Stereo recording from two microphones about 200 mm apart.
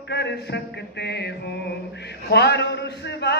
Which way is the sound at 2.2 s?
55° left (ahead or behind).